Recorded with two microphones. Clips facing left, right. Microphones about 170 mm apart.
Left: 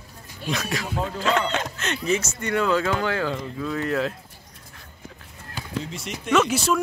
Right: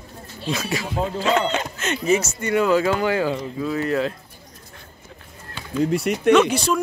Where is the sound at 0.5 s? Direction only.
5° right (ahead or behind).